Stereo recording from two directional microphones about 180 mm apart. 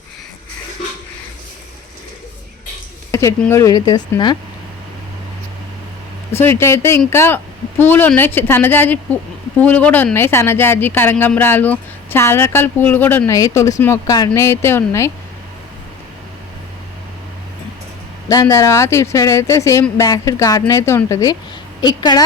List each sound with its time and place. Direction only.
3.1 s a woman's voice: 15° left (ahead or behind)
6.3 s speech: 15° left (ahead or behind)
18.3 s a woman's voice: 20° left (ahead or behind)